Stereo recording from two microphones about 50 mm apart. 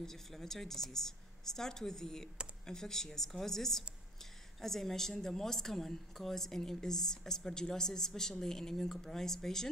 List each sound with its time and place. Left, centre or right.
0.0 s a woman's voice: centre